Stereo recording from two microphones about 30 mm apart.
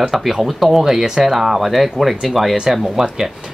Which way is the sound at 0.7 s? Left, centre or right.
Centre.